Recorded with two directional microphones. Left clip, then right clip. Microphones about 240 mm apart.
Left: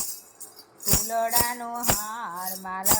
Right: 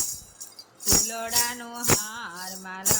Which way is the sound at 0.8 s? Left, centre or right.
Centre.